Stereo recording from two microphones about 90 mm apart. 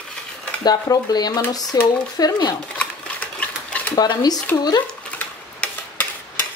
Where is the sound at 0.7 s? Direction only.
50° left (ahead or behind).